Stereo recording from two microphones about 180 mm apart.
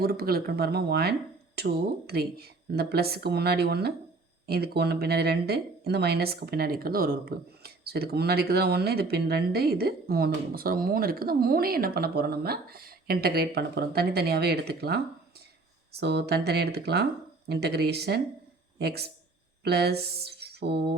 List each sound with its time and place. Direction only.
0.0 s speech: 60° right (ahead or behind)